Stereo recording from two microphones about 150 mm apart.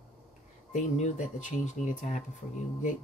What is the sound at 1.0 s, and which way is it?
Speech, 55° left (ahead or behind).